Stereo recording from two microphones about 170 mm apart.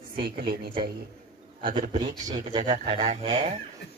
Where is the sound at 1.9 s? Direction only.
30° right (ahead or behind).